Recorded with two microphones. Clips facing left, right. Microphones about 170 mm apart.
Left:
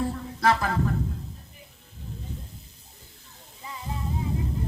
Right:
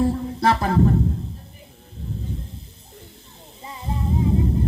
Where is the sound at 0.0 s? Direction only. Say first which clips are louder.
Right 5 dB; 30° right (ahead or behind).